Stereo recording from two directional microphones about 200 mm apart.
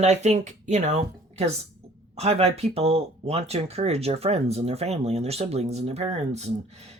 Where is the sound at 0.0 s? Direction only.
35° right (ahead or behind).